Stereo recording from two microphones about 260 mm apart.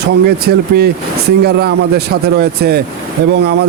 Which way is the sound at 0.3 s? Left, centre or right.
Right.